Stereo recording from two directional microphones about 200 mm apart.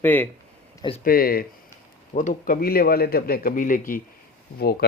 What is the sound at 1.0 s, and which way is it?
Speech, 45° left (ahead or behind).